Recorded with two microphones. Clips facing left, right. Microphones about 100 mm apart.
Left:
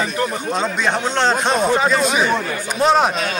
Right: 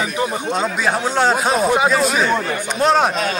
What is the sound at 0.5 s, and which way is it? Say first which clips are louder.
Speech: even; 5° right (ahead or behind).